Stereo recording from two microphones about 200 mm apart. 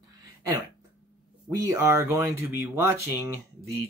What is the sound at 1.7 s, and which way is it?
Speech, 15° right (ahead or behind).